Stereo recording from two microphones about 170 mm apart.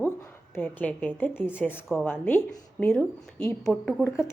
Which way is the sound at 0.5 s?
10° left (ahead or behind).